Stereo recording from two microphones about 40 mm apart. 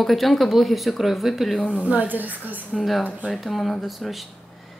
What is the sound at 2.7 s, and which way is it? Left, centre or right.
Speech, centre.